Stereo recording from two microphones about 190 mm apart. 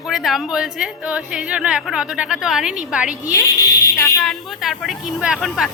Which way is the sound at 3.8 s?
15° left (ahead or behind).